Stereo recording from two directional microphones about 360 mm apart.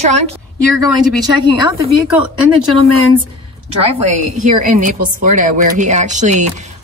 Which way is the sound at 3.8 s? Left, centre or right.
Centre.